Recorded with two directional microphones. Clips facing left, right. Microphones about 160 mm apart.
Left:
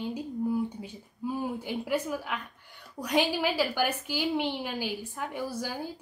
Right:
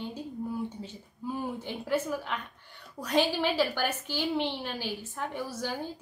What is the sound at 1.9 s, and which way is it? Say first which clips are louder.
A woman's voice: right 2 dB; 10° left (ahead or behind).